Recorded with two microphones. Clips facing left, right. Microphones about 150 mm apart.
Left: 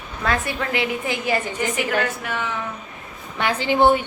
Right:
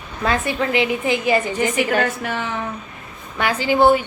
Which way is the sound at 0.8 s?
20° right (ahead or behind).